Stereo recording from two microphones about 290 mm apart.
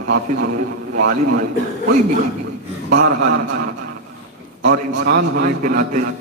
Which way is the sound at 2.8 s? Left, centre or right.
Right.